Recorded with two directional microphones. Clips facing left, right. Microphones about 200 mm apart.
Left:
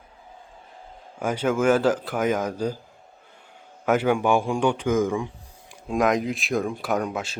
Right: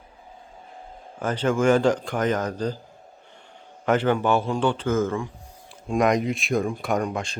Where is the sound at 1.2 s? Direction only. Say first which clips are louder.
Even; 10° left (ahead or behind).